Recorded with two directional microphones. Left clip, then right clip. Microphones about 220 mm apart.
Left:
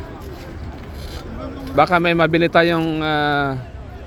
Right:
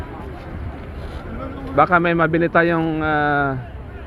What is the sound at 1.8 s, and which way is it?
Speech, 15° left (ahead or behind).